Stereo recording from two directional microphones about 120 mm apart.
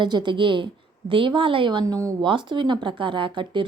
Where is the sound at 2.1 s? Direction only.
40° right (ahead or behind).